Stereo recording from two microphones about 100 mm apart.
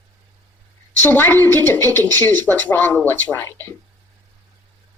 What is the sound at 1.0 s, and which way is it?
Speech, 20° left (ahead or behind).